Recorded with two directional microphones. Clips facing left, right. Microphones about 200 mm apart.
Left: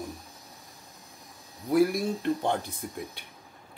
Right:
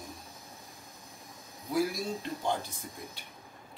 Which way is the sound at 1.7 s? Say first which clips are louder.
Left 7 dB; 60° left (ahead or behind).